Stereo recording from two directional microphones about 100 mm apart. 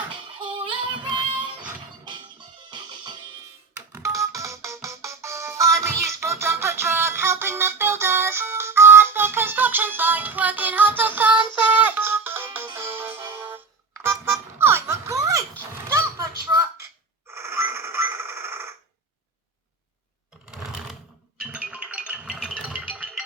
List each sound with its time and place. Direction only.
0.3 s music: 55° right (ahead or behind)
2.6 s music: 50° right (ahead or behind)
3.9 s music: 30° right (ahead or behind)
15.9 s a sound: 30° right (ahead or behind)
20.4 s computer keyboard: 5° right (ahead or behind)
21.4 s music: 10° right (ahead or behind)